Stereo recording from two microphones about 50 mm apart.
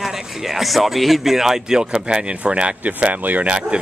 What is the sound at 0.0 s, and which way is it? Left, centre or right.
Speech, centre.